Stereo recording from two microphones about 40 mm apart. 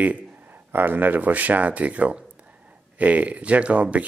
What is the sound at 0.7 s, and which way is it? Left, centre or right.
Speech, right.